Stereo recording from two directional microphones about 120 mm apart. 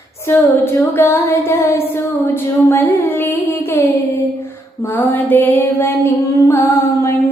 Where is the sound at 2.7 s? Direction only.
20° left (ahead or behind).